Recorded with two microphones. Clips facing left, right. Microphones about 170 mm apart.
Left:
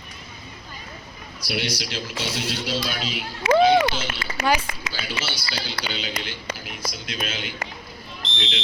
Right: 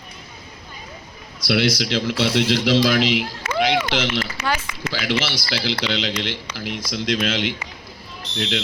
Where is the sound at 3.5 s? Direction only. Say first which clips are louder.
Left 3 dB; 90° right.